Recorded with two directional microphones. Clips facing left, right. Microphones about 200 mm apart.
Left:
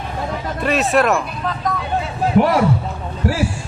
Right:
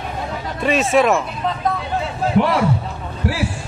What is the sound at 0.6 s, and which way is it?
Speech, centre (ahead or behind).